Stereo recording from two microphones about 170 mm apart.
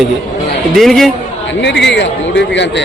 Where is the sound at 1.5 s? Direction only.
90° left.